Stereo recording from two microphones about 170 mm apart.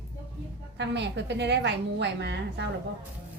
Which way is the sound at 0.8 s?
90° right.